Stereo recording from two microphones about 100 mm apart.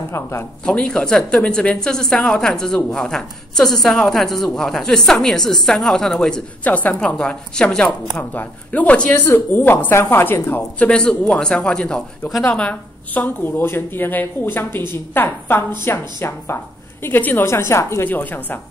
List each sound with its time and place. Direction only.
0.1 s a woman's voice: 30° left (ahead or behind)
0.7 s a woman's voice: 10° left (ahead or behind)
6.6 s a woman's voice: 15° left (ahead or behind)